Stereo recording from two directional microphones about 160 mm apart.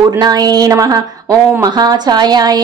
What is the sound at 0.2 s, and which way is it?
A woman's voice, 25° right (ahead or behind).